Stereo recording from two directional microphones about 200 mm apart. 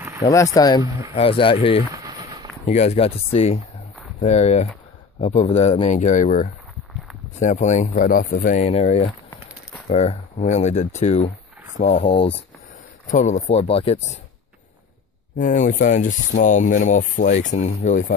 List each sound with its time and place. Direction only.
0.3 s speech: 15° left (ahead or behind); by 14.2 s 30° left (ahead or behind)
15.3 s speech: 40° left (ahead or behind)